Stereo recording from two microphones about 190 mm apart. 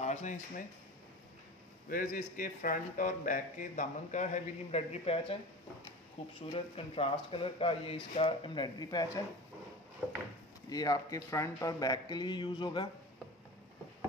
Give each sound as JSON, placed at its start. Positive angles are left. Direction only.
{"t": 0.0, "sound": "speech", "side_deg": 40}
{"t": 1.9, "sound": "speech", "side_deg": 45}
{"t": 6.4, "sound": "speech", "side_deg": 30}
{"t": 10.7, "sound": "speech", "side_deg": 20}